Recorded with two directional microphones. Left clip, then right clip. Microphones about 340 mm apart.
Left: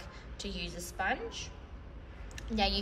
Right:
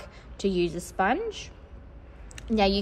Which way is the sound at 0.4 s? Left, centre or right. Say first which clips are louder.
Right 14 dB; centre.